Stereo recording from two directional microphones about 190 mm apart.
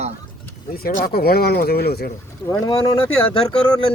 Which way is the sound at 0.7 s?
50° left (ahead or behind).